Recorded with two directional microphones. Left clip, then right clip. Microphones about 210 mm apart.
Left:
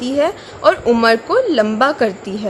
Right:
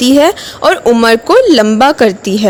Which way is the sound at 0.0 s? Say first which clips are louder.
Right 9 dB; 40° right (ahead or behind).